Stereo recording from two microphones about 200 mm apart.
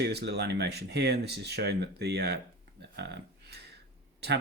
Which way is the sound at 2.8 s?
60° right (ahead or behind).